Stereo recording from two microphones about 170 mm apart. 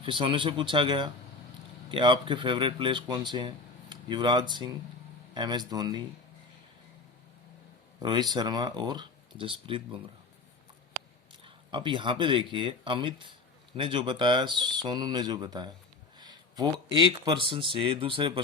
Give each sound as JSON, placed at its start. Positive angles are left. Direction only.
{"t": 0.0, "sound": "speech", "side_deg": -30}
{"t": 8.0, "sound": "speech", "side_deg": -25}
{"t": 11.4, "sound": "speech", "side_deg": -30}